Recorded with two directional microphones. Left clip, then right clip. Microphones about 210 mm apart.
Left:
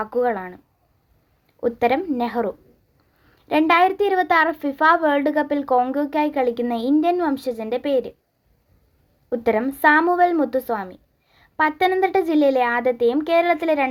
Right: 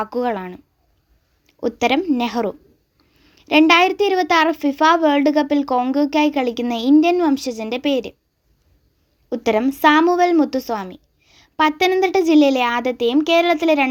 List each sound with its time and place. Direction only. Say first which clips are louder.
0.0 s a woman's voice: even; 30° right (ahead or behind)
1.6 s a woman's voice: right 2 dB; 30° right (ahead or behind)
9.3 s a woman's voice: right 2 dB; 30° right (ahead or behind)